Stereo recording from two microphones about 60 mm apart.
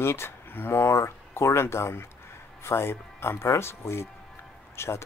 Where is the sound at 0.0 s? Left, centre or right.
Left.